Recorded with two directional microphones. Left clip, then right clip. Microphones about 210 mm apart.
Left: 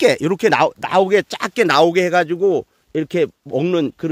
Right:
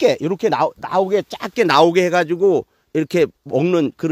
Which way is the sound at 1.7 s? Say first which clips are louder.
Right 1 dB; 20° right (ahead or behind).